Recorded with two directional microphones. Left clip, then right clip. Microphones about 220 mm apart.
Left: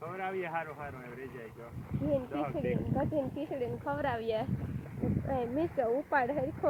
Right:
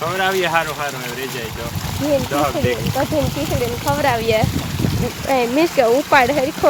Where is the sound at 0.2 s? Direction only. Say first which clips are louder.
Right 18 dB; 25° right (ahead or behind).